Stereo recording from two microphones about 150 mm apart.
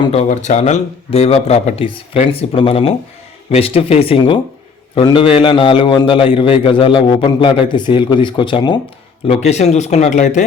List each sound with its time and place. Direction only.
0.3 s a man's voice: 50° left (ahead or behind); by 8.8 s 30° left (ahead or behind)
9.2 s speech: 45° left (ahead or behind)